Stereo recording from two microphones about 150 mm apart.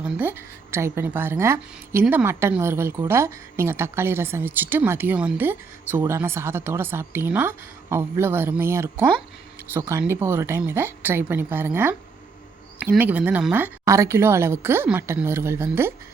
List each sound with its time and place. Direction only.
0.0 s speech: 10° right (ahead or behind)